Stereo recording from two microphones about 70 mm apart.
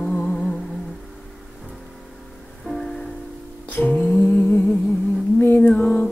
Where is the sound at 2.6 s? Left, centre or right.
Centre.